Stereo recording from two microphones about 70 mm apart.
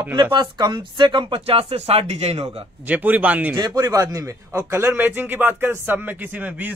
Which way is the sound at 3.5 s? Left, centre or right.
Right.